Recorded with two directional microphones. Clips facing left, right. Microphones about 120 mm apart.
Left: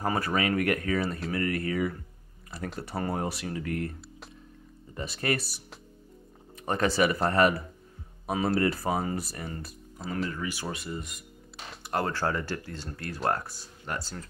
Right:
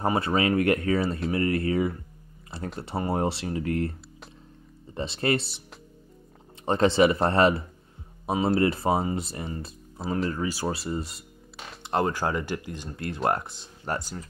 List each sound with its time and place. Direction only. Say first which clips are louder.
0.0 s speech: right 4 dB; 25° right (ahead or behind)
4.9 s speech: right 4 dB; 25° right (ahead or behind)
6.6 s speech: right 5 dB; 25° right (ahead or behind)
11.8 s speech: right 3 dB; 20° right (ahead or behind)
13.9 s speech: right 5 dB; 40° right (ahead or behind)